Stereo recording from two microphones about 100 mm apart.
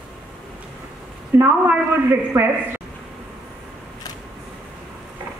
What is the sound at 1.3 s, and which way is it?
A woman's voice, 20° right (ahead or behind).